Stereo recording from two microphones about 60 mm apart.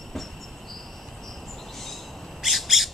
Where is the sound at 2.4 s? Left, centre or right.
Centre.